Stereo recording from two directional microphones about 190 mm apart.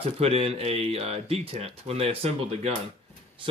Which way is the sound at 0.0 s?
30° right (ahead or behind).